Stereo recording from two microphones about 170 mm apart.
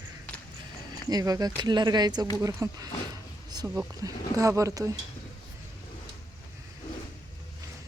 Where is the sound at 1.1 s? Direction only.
20° right (ahead or behind).